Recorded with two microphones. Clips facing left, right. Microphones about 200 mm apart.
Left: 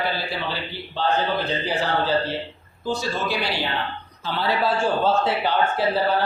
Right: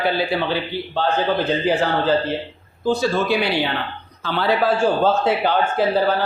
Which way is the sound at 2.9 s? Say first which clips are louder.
Right 7 dB; 55° right (ahead or behind).